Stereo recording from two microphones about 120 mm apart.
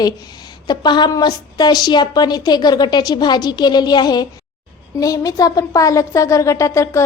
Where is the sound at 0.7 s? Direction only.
35° left (ahead or behind).